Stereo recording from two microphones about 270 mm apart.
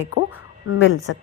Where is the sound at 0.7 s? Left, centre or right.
Left.